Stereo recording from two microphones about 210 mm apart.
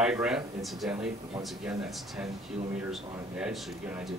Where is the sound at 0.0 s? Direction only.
5° right (ahead or behind).